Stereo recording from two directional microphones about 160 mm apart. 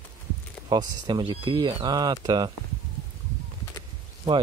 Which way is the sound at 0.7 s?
25° right (ahead or behind).